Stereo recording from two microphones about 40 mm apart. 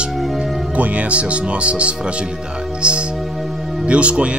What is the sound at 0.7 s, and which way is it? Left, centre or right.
Speech, right.